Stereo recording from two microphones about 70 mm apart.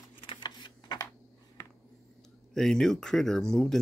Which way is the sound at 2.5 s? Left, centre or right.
Centre.